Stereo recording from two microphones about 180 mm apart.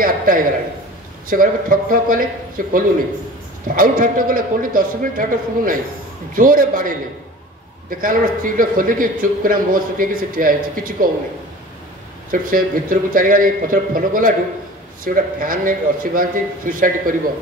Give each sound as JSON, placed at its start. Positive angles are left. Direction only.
{"t": 0.0, "sound": "a sound", "side_deg": -50}
{"t": 1.3, "sound": "a man's voice", "side_deg": -50}
{"t": 12.3, "sound": "a man's voice", "side_deg": -50}